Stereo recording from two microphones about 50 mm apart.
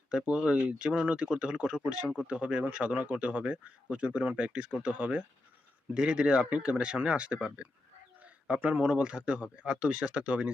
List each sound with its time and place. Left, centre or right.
0.1 s speech: centre